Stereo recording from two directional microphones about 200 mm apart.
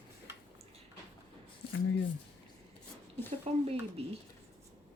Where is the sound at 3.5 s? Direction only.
30° right (ahead or behind).